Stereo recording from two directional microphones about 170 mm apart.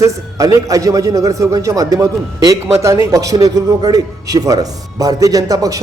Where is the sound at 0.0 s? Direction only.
20° right (ahead or behind).